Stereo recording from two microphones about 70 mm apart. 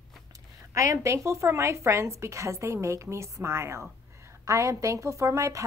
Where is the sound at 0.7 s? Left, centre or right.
Right.